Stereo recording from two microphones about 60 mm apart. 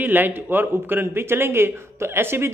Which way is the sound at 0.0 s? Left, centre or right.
Right.